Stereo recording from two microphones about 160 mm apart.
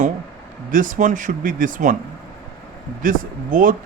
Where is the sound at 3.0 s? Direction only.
55° right (ahead or behind).